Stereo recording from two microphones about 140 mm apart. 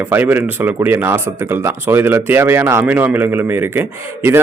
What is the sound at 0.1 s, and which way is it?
Speech, 15° right (ahead or behind).